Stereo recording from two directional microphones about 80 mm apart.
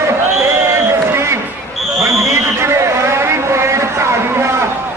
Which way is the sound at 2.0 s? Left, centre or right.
Right.